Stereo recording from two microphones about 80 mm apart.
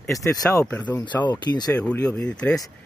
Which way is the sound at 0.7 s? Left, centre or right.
Left.